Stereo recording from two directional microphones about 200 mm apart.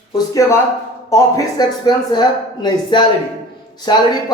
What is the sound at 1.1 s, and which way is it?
A man's voice, 20° left (ahead or behind).